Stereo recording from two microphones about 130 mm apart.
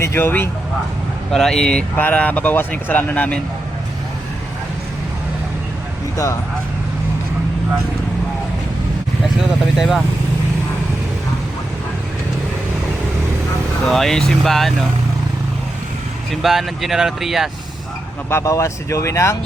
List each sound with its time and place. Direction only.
0.0 s speech: 20° left (ahead or behind)
1.3 s speech: 5° left (ahead or behind)
9.7 s speech: centre (ahead or behind)
13.8 s speech: 5° left (ahead or behind)
16.3 s speech: centre (ahead or behind)
18.3 s speech: 20° left (ahead or behind)